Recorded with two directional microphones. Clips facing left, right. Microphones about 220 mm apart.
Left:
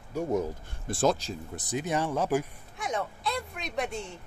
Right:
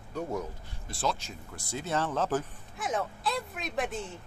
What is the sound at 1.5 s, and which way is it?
Speech, 20° left (ahead or behind).